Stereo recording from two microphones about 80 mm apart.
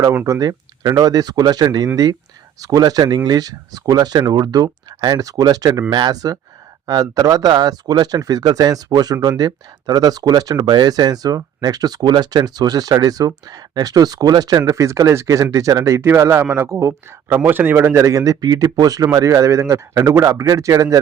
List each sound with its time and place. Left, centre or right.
0.3 s speech: right
5.9 s speech: right
14.7 s speech: right
16.0 s speech: right
18.0 s speech: right